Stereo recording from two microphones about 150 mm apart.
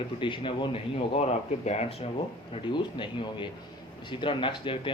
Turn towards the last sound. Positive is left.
turn(degrees=35)  # may be behind; listen again after turning